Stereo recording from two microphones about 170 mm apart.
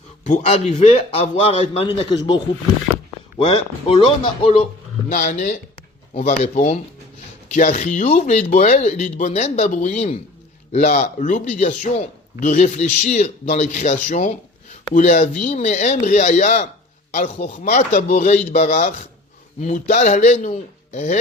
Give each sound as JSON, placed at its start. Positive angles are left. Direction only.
{"t": 0.3, "sound": "a man's voice", "side_deg": 40}
{"t": 5.0, "sound": "a man's voice", "side_deg": 45}